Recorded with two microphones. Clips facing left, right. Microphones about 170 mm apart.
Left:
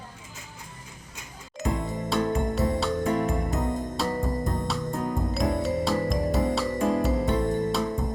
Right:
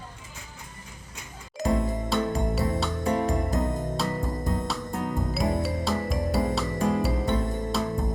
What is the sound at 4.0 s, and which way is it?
Music, centre (ahead or behind).